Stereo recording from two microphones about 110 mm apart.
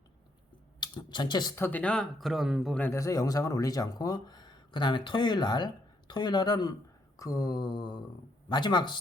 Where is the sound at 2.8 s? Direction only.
25° left (ahead or behind).